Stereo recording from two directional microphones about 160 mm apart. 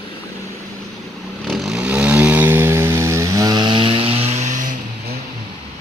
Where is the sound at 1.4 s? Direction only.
Centre (ahead or behind); by 4.7 s 50° right (ahead or behind).